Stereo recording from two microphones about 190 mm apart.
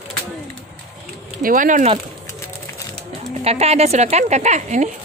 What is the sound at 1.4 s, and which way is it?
Speech, 45° right (ahead or behind).